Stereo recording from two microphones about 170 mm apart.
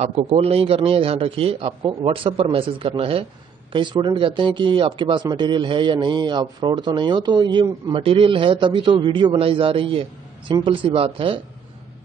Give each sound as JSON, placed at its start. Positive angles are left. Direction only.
{"t": 0.0, "sound": "a man's voice", "side_deg": -35}